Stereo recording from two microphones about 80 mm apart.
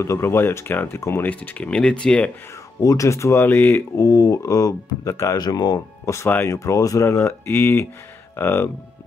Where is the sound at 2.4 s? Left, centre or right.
Left.